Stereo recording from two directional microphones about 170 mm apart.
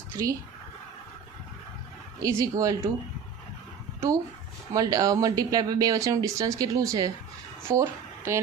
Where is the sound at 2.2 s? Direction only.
20° right (ahead or behind).